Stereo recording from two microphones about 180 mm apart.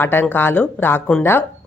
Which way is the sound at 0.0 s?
10° left (ahead or behind).